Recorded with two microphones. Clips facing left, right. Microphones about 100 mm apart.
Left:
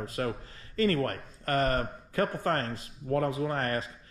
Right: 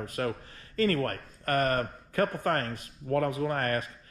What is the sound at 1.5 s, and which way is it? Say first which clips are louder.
Speech: right 1 dB; 30° left (ahead or behind).